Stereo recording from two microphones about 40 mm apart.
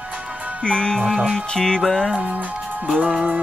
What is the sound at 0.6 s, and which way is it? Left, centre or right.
Music, left.